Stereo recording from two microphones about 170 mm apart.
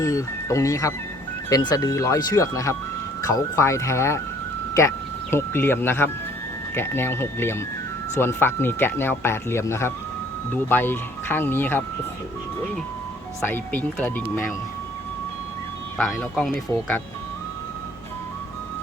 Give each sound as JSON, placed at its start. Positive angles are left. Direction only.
{"t": 0.0, "sound": "speech", "side_deg": 20}
{"t": 5.3, "sound": "speech", "side_deg": 15}
{"t": 13.4, "sound": "speech", "side_deg": 10}
{"t": 16.0, "sound": "speech", "side_deg": 5}